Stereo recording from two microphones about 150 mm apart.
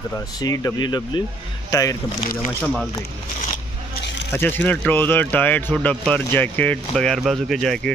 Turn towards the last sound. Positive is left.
turn(degrees=5)  # may be behind; listen again after turning